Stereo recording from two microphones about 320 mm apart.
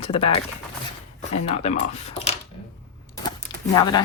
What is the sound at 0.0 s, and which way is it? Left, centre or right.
Speech, centre.